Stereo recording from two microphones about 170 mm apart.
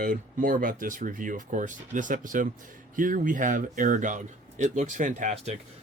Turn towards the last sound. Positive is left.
turn(degrees=-45)  # may be behind; listen again after turning